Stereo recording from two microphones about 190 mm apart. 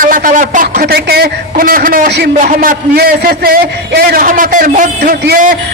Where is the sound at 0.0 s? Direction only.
45° right (ahead or behind).